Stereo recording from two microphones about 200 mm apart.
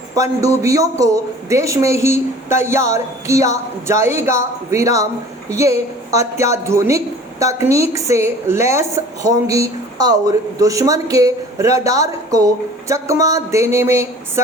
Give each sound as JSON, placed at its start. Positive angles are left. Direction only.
{"t": 0.1, "sound": "a woman's voice", "side_deg": -15}